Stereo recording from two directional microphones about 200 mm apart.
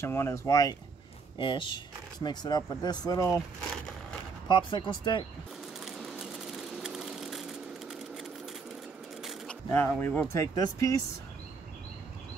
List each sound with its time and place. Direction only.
0.0 s speech: 10° left (ahead or behind)
4.5 s speech: 25° left (ahead or behind)
5.9 s sewing machine: centre (ahead or behind)
9.2 s a sound: centre (ahead or behind)
9.7 s speech: 10° left (ahead or behind)